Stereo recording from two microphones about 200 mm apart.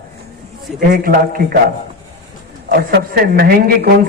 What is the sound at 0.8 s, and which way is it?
Speech, 45° right (ahead or behind).